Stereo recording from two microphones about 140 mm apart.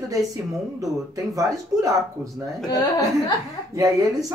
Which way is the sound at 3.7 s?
25° right (ahead or behind).